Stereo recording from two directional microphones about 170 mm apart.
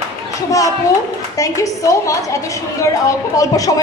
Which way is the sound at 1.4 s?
20° left (ahead or behind).